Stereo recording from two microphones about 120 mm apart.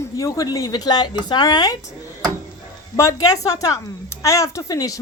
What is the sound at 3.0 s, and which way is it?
Speech, 30° left (ahead or behind).